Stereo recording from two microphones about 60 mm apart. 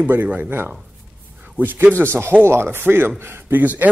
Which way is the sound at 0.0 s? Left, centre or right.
Right.